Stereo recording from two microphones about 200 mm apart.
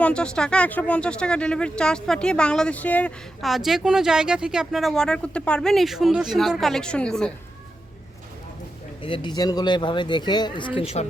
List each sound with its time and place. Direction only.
0.0 s speech: 5° left (ahead or behind)
9.0 s a woman's voice: 25° left (ahead or behind)